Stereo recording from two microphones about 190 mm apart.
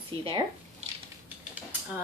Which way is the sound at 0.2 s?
25° right (ahead or behind).